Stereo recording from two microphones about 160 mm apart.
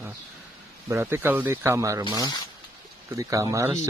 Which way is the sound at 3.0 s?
20° right (ahead or behind).